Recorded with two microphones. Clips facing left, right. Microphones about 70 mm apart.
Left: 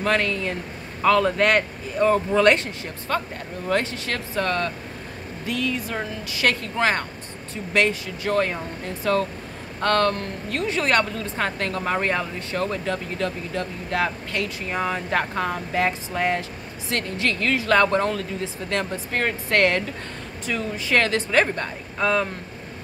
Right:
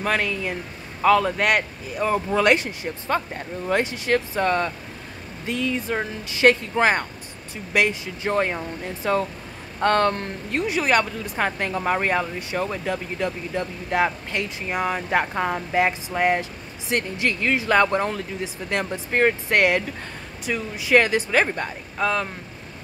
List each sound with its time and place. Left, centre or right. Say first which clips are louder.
0.0 s speech: left 1 dB; centre; by 10.7 s right
10.7 s speech: even; centre
22.0 s speech: left 2 dB; centre